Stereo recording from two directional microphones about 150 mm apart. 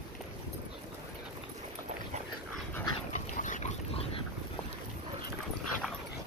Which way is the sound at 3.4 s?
55° left (ahead or behind).